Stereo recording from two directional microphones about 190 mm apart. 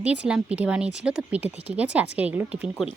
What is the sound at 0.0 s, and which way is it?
Speech, 5° right (ahead or behind).